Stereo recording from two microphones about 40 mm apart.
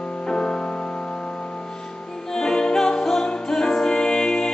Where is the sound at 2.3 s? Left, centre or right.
Centre.